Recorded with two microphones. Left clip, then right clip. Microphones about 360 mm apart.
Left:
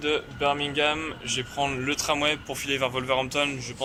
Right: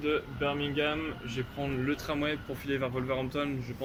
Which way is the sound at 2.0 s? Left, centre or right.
Centre.